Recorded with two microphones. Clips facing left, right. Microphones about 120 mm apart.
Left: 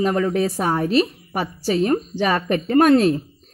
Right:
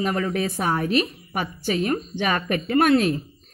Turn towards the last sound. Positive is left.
turn(degrees=35)  # may be behind; listen again after turning